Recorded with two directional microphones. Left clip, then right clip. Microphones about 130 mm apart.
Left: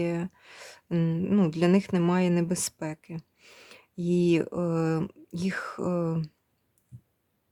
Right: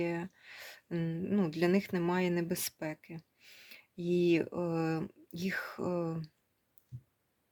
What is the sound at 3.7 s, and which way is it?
Speech, 50° left (ahead or behind).